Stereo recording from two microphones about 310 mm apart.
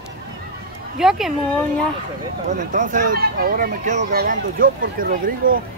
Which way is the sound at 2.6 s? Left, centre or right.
Right.